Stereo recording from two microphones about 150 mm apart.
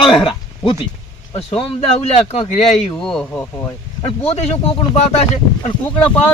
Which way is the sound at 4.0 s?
40° left (ahead or behind).